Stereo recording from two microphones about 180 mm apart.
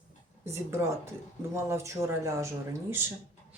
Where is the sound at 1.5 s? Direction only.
15° right (ahead or behind).